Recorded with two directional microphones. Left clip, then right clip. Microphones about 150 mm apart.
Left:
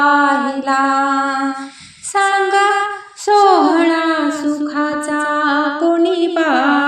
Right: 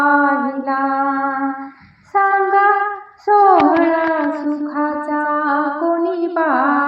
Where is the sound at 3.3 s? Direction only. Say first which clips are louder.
Left 1 dB; 50° left (ahead or behind).